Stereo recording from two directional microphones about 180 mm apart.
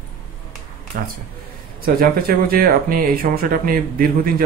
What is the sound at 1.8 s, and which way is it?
Speech, 55° right (ahead or behind).